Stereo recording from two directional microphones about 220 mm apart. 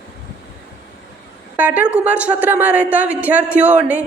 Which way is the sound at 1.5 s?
10° right (ahead or behind).